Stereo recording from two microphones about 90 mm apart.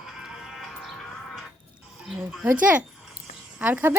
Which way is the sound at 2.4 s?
15° right (ahead or behind).